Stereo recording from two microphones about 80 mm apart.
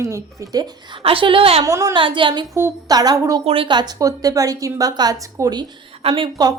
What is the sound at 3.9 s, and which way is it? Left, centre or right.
Speech, right.